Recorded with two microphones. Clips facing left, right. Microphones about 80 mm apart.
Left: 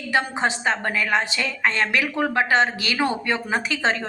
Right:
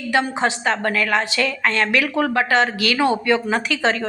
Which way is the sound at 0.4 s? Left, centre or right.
Left.